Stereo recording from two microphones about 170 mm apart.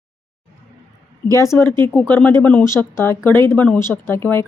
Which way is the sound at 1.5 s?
15° left (ahead or behind).